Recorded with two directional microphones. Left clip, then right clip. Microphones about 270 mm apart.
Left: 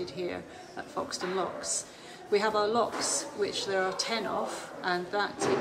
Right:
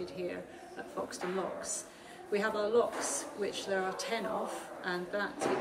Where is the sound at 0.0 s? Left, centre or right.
Centre.